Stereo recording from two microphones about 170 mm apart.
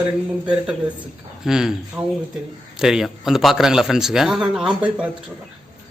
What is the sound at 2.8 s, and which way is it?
A man's voice, 5° right (ahead or behind).